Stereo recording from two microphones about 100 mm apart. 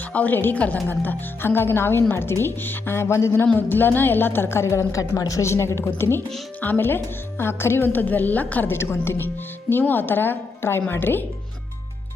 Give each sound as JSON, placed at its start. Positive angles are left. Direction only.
{"t": 0.1, "sound": "speech", "side_deg": 15}
{"t": 3.4, "sound": "speech", "side_deg": 15}